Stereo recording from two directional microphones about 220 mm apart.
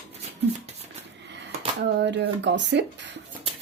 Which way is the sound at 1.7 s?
50° right (ahead or behind).